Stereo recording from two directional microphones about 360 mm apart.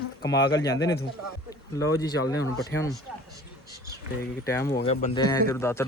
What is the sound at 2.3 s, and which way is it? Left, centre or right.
Speech, centre.